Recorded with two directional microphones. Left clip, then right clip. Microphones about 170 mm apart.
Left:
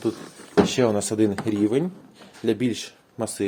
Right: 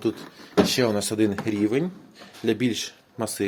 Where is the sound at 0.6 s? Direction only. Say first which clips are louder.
Left 1 dB; 15° left (ahead or behind).